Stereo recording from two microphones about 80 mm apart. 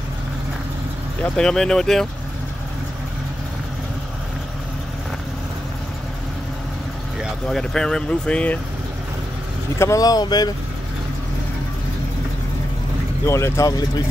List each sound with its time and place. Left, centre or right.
1.2 s speech: centre
7.4 s speech: centre
9.8 s speech: left
13.2 s speech: left